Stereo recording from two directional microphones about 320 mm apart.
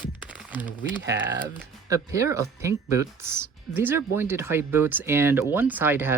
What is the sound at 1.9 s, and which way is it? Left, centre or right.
Speech, centre.